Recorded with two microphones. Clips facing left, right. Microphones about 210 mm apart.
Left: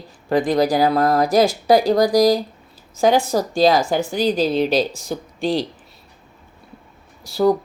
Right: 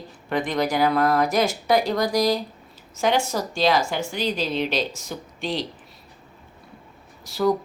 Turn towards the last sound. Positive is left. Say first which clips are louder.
# left 5 dB
turn(degrees=35)  # may be behind; listen again after turning